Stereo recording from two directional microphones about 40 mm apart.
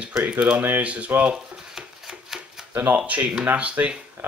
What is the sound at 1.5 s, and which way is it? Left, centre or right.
Shuffling cards, centre.